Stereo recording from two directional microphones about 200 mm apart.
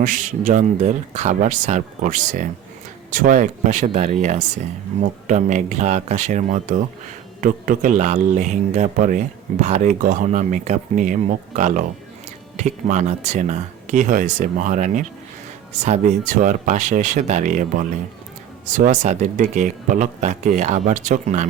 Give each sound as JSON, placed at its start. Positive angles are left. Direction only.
{"t": 0.0, "sound": "speech", "side_deg": -40}